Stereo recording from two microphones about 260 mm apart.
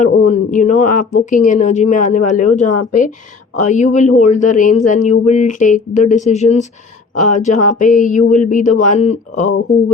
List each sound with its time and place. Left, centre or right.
0.0 s speech: left